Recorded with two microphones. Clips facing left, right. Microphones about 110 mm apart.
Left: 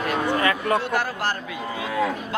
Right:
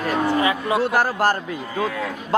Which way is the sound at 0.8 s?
40° right (ahead or behind).